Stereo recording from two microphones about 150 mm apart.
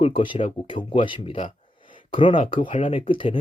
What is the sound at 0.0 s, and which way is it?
Speech, 35° left (ahead or behind).